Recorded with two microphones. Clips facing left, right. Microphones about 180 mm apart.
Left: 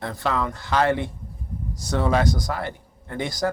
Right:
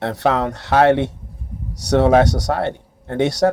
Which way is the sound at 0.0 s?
70° right (ahead or behind).